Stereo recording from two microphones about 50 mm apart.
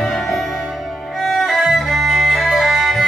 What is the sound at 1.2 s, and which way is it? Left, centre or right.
Violin, centre.